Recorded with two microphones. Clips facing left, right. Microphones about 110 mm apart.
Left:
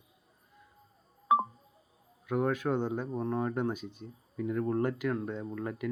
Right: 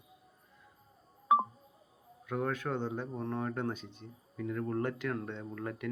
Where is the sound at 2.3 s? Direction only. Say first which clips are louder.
Left 5 dB; 15° left (ahead or behind).